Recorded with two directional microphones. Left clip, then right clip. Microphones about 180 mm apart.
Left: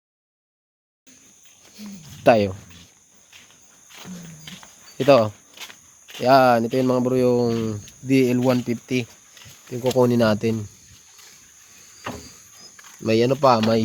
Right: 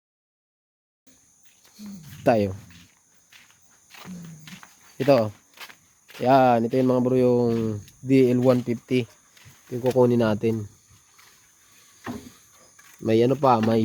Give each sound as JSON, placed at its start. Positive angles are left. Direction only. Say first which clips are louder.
{"t": 1.7, "sound": "speech", "louder": "left 3 dB", "side_deg": 0}
{"t": 4.9, "sound": "speech", "louder": "left 4 dB", "side_deg": 0}
{"t": 9.8, "sound": "speech", "louder": "left 2 dB", "side_deg": -5}
{"t": 13.0, "sound": "speech", "louder": "left 2 dB", "side_deg": -5}